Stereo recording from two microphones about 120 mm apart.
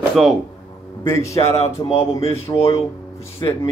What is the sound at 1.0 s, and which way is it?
Speech, 25° left (ahead or behind).